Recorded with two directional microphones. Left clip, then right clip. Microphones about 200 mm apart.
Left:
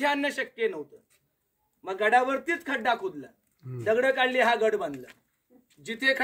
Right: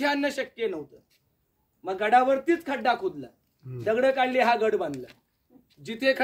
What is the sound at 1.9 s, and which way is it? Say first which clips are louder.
Speech: right 2 dB; 50° right (ahead or behind).